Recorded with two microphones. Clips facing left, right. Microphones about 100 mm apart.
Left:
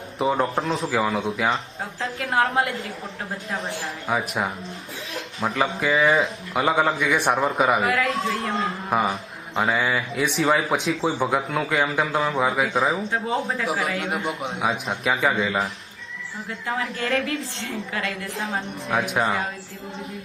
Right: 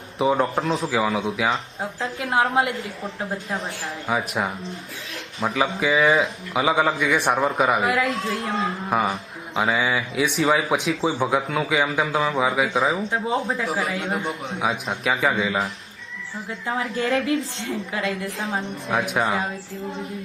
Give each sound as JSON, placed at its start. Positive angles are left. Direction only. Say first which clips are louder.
{"t": 0.2, "sound": "a man's voice", "louder": "right 2 dB", "side_deg": 0}
{"t": 1.8, "sound": "a woman's voice", "louder": "right 1 dB", "side_deg": -25}
{"t": 4.0, "sound": "a man's voice", "louder": "right 1 dB", "side_deg": 0}
{"t": 8.0, "sound": "a man's voice", "louder": "left 1 dB", "side_deg": 30}
{"t": 8.4, "sound": "a man's voice", "louder": "right 1 dB", "side_deg": 0}
{"t": 16.7, "sound": "a woman's voice", "louder": "right 2 dB", "side_deg": -25}
{"t": 18.5, "sound": "a man's voice", "louder": "even", "side_deg": 0}